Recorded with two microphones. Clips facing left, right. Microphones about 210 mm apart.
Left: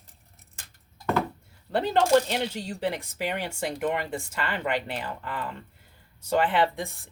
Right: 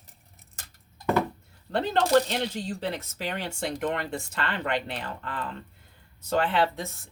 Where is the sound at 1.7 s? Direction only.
10° left (ahead or behind).